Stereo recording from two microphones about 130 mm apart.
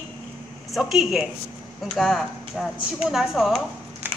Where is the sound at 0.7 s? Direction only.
Centre (ahead or behind).